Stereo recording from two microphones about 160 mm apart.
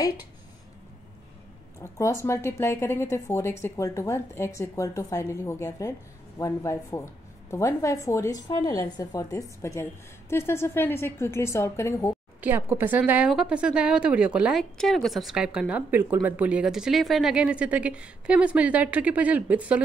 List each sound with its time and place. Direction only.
1.8 s a woman's voice: 20° left (ahead or behind)
12.4 s speech: 10° right (ahead or behind)